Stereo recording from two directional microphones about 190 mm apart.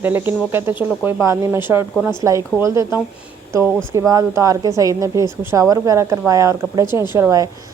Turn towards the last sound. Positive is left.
turn(degrees=-15)  # may be behind; listen again after turning